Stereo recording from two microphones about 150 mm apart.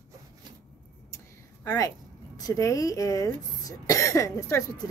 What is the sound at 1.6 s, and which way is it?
Speech, 20° left (ahead or behind).